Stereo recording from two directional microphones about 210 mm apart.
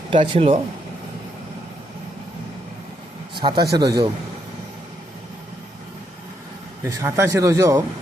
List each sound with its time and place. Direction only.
0.1 s a man's voice: 25° right (ahead or behind)
3.3 s a man's voice: 20° right (ahead or behind)
6.8 s speech: 10° right (ahead or behind)